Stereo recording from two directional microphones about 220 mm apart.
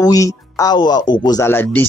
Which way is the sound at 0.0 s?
15° left (ahead or behind).